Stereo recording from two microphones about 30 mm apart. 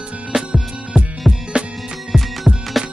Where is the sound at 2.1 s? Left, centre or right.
Centre.